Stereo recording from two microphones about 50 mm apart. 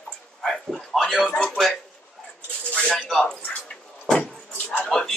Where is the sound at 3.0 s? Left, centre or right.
Centre.